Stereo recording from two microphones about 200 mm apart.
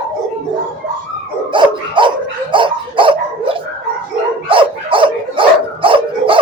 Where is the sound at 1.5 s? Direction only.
25° right (ahead or behind).